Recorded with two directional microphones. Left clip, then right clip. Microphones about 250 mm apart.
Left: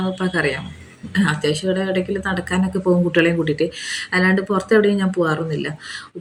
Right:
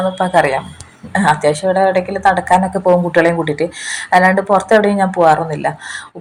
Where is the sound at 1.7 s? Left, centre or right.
Right.